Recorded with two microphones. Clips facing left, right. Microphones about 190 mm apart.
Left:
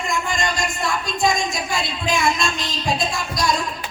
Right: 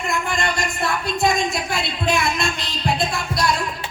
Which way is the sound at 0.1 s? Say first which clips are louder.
Right 1 dB; 60° right (ahead or behind).